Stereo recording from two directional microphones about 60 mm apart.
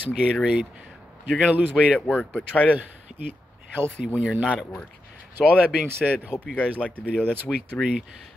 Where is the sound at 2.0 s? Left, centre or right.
Left.